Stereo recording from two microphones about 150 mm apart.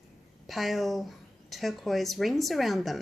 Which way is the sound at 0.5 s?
Centre (ahead or behind).